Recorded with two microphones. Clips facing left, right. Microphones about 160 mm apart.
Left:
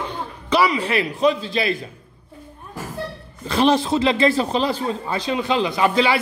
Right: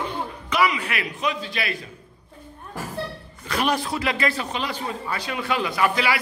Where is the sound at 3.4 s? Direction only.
30° left (ahead or behind).